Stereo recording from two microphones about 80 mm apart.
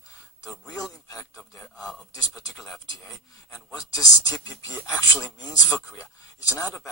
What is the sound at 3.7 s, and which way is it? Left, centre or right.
Speech, left.